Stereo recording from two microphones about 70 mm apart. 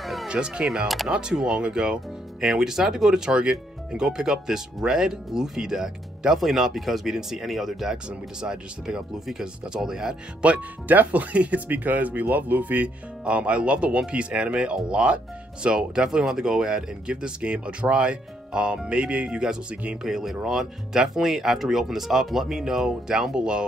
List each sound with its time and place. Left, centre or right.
0.0 s cat: centre
0.3 s speech: centre
0.7 s speech: centre
10.5 s speech: right